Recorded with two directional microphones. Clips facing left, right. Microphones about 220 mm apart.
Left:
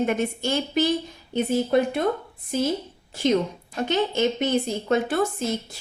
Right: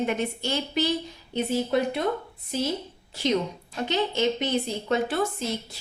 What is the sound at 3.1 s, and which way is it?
A woman's voice, 50° left (ahead or behind).